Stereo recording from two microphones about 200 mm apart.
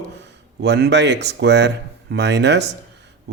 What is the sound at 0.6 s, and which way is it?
Speech, 60° right (ahead or behind).